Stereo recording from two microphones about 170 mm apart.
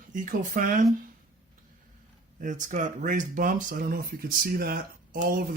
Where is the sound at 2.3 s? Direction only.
50° right (ahead or behind).